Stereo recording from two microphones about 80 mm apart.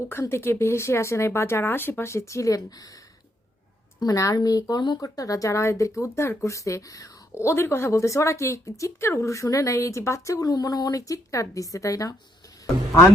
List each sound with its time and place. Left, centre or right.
0.1 s speech: left
4.0 s speech: left